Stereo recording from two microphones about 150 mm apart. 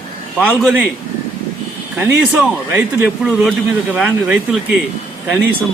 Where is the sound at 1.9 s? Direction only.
10° right (ahead or behind).